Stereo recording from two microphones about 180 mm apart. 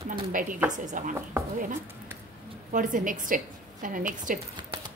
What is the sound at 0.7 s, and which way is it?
Speech, 45° right (ahead or behind).